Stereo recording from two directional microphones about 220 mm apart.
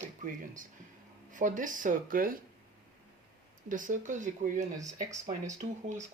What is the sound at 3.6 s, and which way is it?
Speech, 35° right (ahead or behind).